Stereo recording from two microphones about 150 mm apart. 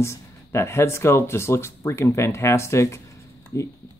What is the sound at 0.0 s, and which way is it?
Speech, 20° left (ahead or behind).